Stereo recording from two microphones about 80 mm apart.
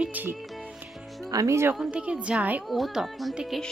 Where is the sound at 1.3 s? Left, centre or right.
Right.